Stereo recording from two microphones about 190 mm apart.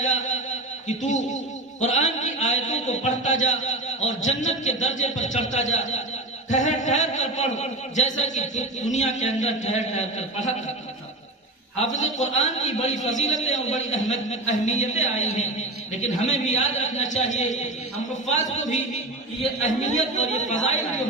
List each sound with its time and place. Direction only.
0.0 s a sound: 40° left (ahead or behind)
0.9 s a man's voice: 40° left (ahead or behind)
11.8 s a man's voice: 40° left (ahead or behind)